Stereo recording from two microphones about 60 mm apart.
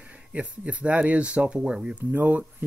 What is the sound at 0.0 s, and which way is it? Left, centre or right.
Speech, right.